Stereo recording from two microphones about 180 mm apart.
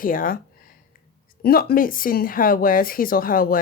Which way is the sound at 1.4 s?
55° left (ahead or behind).